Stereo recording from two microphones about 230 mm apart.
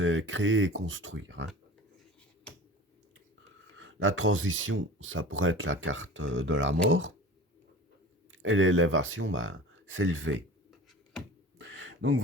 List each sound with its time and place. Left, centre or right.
0.0 s speech: right
3.8 s speech: right
8.3 s speech: right
10.7 s hands: centre
11.5 s a sound: right